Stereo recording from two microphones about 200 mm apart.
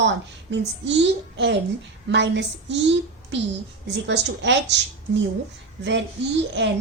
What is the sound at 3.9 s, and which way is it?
Speech, 60° right (ahead or behind).